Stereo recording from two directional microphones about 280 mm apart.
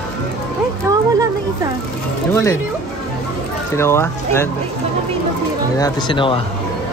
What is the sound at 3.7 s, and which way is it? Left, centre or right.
Speech, centre.